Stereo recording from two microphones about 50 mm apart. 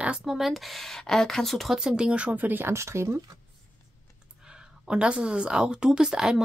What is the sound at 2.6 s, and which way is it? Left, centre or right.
Speech, right.